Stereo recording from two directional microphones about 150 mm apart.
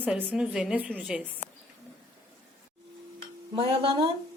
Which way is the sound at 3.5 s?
40° right (ahead or behind).